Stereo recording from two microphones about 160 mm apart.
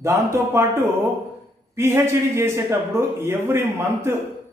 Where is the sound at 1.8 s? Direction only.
15° right (ahead or behind).